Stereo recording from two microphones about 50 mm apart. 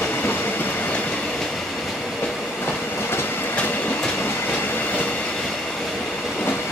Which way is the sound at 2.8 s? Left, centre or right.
Left.